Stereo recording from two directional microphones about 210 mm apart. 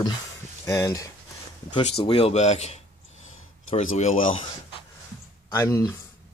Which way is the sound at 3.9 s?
35° left (ahead or behind).